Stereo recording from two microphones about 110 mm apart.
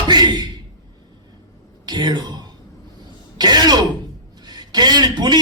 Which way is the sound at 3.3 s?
40° right (ahead or behind).